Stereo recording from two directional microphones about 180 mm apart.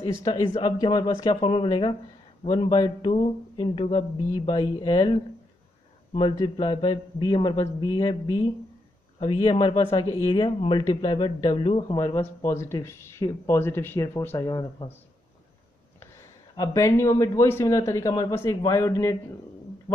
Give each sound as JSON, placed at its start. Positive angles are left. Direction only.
{"t": 0.0, "sound": "speech", "side_deg": 25}
{"t": 6.1, "sound": "speech", "side_deg": 25}
{"t": 16.0, "sound": "speech", "side_deg": 20}